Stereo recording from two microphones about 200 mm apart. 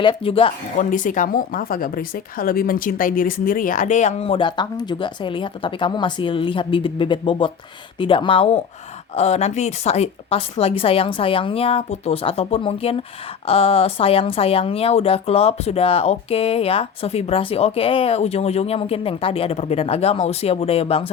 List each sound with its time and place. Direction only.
0.0 s a woman's voice: 25° left (ahead or behind)
0.8 s a woman's voice: 40° left (ahead or behind)